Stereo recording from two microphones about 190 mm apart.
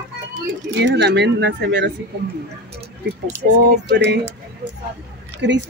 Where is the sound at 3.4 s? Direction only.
50° right (ahead or behind).